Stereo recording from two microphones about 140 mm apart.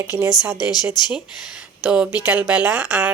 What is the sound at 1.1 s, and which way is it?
Speech, 5° right (ahead or behind).